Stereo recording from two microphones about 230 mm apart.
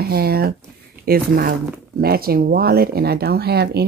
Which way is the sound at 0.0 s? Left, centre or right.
Right.